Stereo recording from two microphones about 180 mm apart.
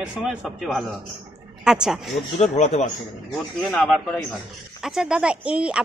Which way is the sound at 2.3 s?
40° left (ahead or behind).